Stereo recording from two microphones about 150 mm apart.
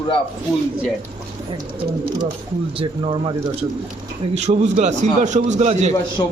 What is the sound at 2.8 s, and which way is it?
Speech, 35° right (ahead or behind).